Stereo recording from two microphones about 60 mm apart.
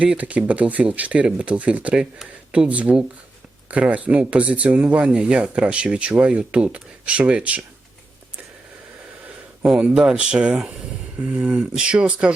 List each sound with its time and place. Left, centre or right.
0.2 s speech: right
9.6 s speech: centre